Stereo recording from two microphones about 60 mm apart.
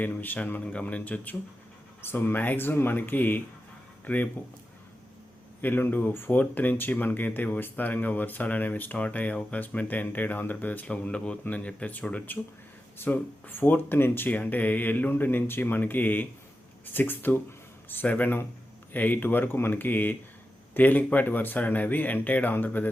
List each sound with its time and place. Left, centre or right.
0.0 s speech: left
5.6 s speech: left
13.0 s speech: left